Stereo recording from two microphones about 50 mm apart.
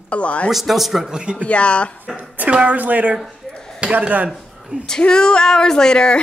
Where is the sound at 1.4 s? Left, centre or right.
Left.